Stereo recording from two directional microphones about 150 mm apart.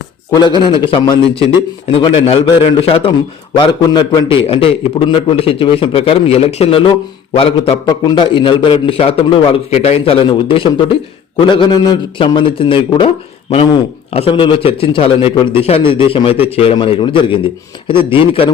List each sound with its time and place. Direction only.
0.4 s a man's voice: 30° left (ahead or behind)
7.9 s a man's voice: 30° left (ahead or behind)